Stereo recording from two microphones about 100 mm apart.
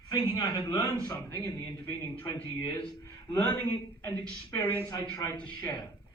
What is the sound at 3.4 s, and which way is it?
Speech, 20° left (ahead or behind).